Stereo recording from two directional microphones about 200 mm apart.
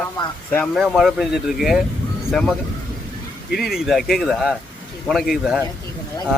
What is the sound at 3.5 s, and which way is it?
Speech, centre (ahead or behind).